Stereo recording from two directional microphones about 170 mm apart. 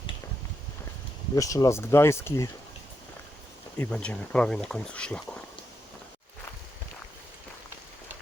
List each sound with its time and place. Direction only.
1.4 s speech: 20° left (ahead or behind)
3.8 s speech: 5° left (ahead or behind)